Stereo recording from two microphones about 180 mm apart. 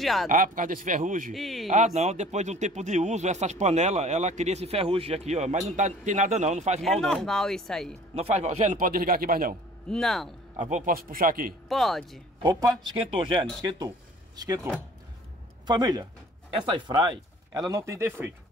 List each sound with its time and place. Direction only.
0.0 s speech: centre (ahead or behind)
0.3 s a man's voice: 50° right (ahead or behind)
1.3 s speech: centre (ahead or behind)
2.0 s speech: 40° right (ahead or behind)
6.8 s speech: centre (ahead or behind)
8.1 s a man's voice: 35° right (ahead or behind); by 9.6 s 55° right (ahead or behind)
9.8 s speech: centre (ahead or behind)
10.5 s a man's voice: 45° right (ahead or behind)
11.7 s speech: centre (ahead or behind)
12.4 s speech: 20° right (ahead or behind)